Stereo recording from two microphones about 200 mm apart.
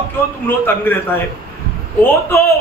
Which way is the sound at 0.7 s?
10° left (ahead or behind).